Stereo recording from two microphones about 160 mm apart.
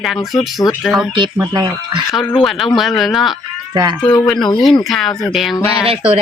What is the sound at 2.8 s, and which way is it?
Speech, centre (ahead or behind).